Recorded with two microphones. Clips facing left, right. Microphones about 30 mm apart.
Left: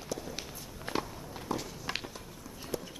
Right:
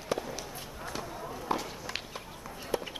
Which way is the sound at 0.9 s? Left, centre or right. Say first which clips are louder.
Left 6 dB; left.